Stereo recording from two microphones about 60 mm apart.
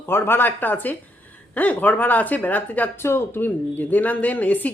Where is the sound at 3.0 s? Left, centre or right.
Left.